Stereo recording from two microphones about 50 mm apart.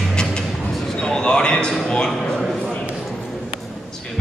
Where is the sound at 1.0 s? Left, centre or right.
Centre.